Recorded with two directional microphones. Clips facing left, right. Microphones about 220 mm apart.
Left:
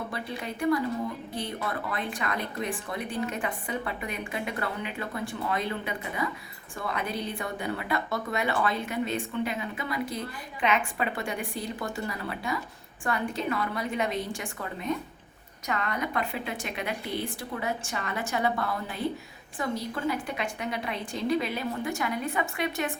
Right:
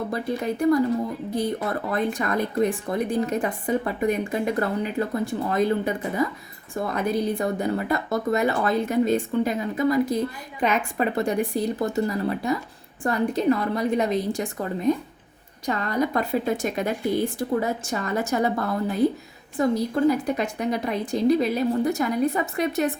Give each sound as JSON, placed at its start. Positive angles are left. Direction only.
{"t": 0.1, "sound": "speech", "side_deg": -40}